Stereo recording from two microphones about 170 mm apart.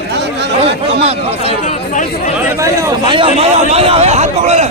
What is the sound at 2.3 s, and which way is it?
Speech, 15° right (ahead or behind).